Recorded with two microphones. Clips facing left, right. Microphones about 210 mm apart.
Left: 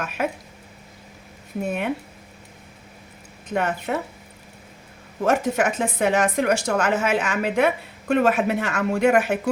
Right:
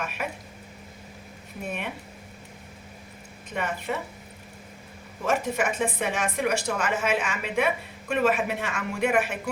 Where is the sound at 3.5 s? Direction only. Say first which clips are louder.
Left 6 dB; 75° left (ahead or behind).